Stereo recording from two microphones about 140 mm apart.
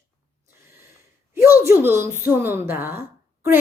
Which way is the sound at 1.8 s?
20° right (ahead or behind).